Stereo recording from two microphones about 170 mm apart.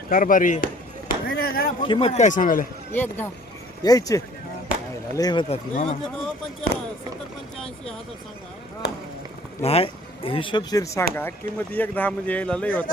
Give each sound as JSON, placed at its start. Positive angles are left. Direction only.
{"t": 0.1, "sound": "chop", "side_deg": 55}
{"t": 1.8, "sound": "a man's voice", "side_deg": 30}
{"t": 2.9, "sound": "speech", "side_deg": 10}
{"t": 5.7, "sound": "speech", "side_deg": 40}
{"t": 9.6, "sound": "speech", "side_deg": 35}